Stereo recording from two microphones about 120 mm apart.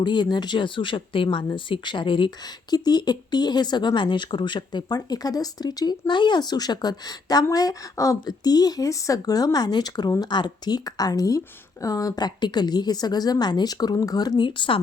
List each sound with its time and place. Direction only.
0.0 s speech: 40° left (ahead or behind)